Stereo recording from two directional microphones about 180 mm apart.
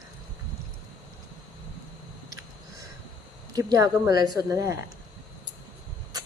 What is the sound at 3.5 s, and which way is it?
Speech, 20° right (ahead or behind).